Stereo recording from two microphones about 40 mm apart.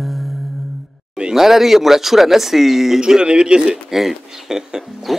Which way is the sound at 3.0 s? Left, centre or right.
Right.